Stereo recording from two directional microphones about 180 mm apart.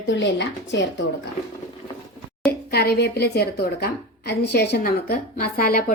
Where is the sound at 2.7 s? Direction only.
60° left (ahead or behind).